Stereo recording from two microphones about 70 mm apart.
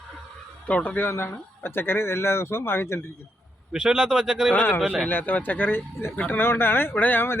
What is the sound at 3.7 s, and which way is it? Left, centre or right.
Speech, centre.